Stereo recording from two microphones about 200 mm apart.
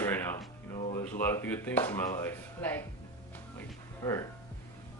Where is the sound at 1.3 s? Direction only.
10° left (ahead or behind).